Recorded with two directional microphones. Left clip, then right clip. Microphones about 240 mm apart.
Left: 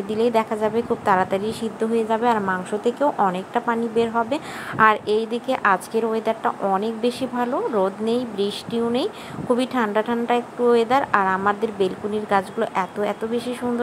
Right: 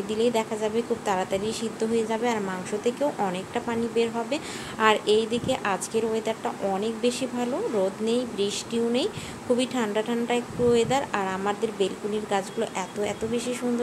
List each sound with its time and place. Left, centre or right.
0.1 s a woman's voice: centre